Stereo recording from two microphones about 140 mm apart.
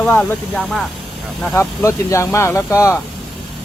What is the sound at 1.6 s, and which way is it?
Speech, 20° left (ahead or behind).